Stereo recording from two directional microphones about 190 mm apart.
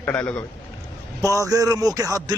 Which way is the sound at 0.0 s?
10° left (ahead or behind).